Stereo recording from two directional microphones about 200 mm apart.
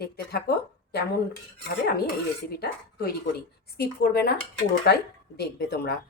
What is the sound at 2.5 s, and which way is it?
Speech, 50° left (ahead or behind).